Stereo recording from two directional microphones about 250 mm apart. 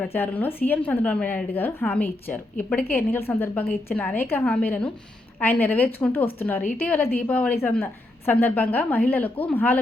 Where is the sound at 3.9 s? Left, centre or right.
Centre.